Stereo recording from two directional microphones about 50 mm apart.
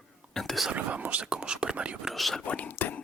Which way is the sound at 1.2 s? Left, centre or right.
Centre.